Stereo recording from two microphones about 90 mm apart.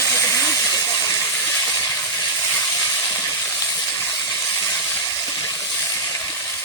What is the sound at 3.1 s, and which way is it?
Vehicle, 20° left (ahead or behind).